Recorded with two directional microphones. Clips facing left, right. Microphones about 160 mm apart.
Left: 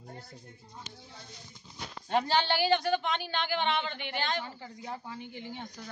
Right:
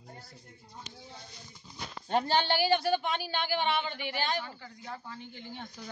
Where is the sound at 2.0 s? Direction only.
40° right (ahead or behind).